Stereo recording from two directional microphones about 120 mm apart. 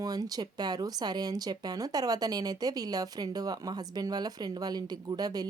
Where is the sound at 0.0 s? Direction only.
30° right (ahead or behind).